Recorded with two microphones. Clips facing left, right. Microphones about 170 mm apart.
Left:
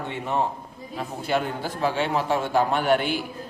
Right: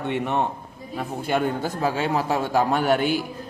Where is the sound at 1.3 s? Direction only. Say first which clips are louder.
Right 2 dB; 45° right (ahead or behind).